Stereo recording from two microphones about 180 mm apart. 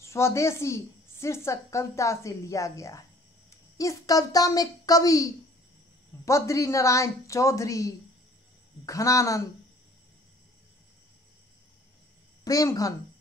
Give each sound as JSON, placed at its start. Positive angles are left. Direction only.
{"t": 0.0, "sound": "a woman's voice", "side_deg": 15}
{"t": 12.4, "sound": "speech", "side_deg": 20}